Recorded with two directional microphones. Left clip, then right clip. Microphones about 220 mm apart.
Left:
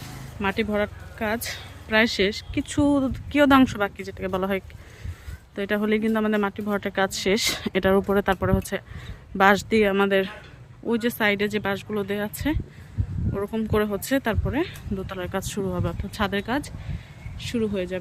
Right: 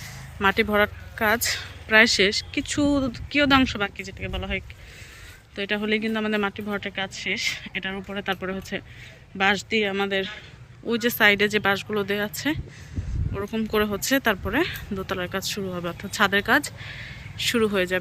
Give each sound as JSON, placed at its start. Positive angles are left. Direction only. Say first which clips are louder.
{"t": 0.3, "sound": "speech", "louder": "right 4 dB", "side_deg": 5}